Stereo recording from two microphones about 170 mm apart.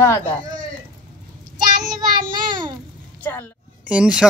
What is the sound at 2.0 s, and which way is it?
Child singing, 25° right (ahead or behind).